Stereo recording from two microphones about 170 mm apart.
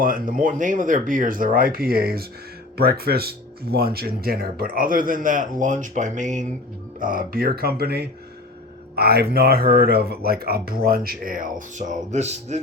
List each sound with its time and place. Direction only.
0.0 s speech: 55° right (ahead or behind)